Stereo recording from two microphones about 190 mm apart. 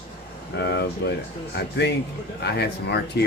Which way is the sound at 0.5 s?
60° left (ahead or behind).